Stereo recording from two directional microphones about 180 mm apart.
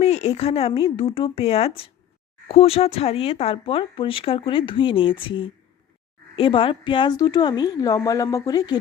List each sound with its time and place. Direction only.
0.0 s a woman's voice: 35° left (ahead or behind)